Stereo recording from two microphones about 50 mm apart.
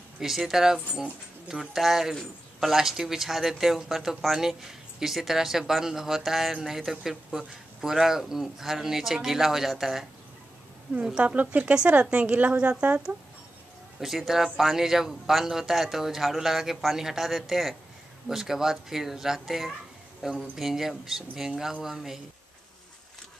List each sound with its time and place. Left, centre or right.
0.2 s a man's voice: centre
11.1 s speech: right
14.0 s a man's voice: centre